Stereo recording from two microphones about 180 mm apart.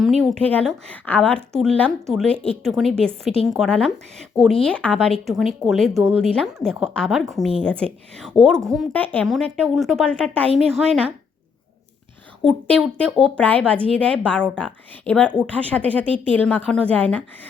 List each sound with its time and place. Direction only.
0.0 s speech: centre (ahead or behind)
12.5 s a woman's voice: 5° left (ahead or behind)